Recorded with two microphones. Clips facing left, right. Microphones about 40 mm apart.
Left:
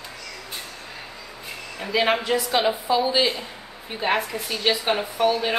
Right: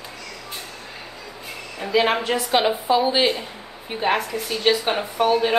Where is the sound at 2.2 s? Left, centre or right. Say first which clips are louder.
Right 2 dB; right.